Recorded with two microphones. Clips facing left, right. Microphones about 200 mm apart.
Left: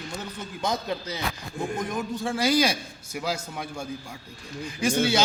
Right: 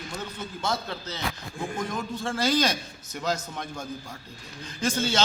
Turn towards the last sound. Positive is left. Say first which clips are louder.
# left 3 dB
turn(degrees=10)  # may be behind; listen again after turning